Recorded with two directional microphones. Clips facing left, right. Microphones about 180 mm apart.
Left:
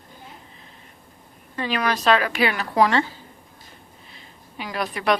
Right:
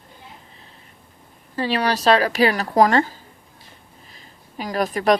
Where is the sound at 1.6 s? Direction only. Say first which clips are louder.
Right 3 dB; 35° right (ahead or behind).